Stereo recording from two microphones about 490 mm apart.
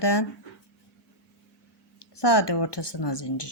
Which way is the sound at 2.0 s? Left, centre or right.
Left.